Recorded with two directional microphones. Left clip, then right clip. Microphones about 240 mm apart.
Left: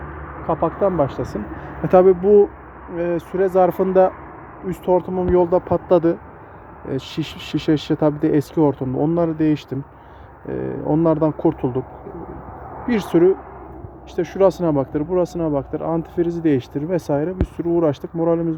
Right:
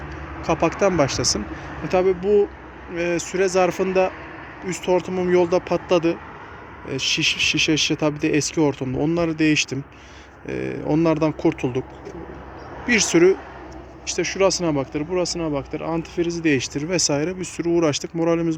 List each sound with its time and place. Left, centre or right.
0.7 s speech: right
1.9 s speech: left
2.9 s speech: centre
12.9 s speech: centre
14.3 s speech: centre